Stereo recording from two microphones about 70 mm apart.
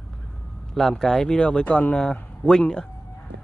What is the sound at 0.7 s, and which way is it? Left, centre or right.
A man's voice, centre.